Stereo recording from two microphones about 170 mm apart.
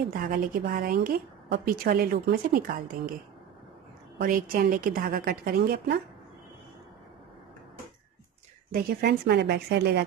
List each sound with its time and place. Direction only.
0.1 s a woman's voice: 55° right (ahead or behind)
4.2 s a woman's voice: 55° right (ahead or behind)
8.7 s a woman's voice: 70° right (ahead or behind)